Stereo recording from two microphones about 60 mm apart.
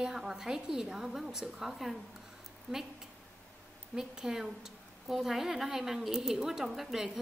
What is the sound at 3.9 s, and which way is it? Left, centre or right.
A woman's voice, centre.